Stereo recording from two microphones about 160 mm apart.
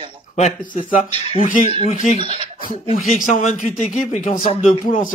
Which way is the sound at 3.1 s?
55° left (ahead or behind).